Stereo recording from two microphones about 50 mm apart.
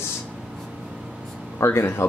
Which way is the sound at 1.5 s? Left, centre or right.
Left.